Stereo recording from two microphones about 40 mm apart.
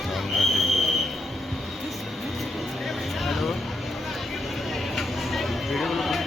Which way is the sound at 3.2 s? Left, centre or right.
Centre.